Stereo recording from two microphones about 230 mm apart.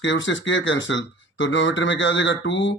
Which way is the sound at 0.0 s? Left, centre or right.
Left.